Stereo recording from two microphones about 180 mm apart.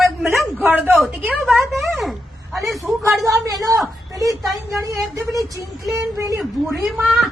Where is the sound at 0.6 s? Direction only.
10° right (ahead or behind).